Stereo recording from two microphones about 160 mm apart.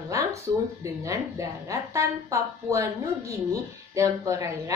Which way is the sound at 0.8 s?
20° right (ahead or behind).